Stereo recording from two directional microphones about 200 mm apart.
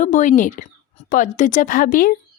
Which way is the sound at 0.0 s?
40° left (ahead or behind).